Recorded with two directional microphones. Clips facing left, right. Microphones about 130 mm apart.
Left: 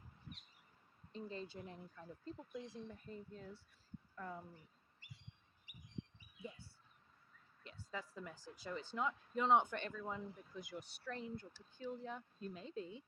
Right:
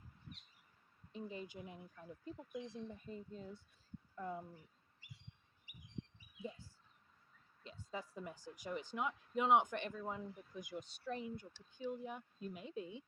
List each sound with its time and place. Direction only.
1.1 s speech: 15° right (ahead or behind)
7.6 s speech: 20° right (ahead or behind)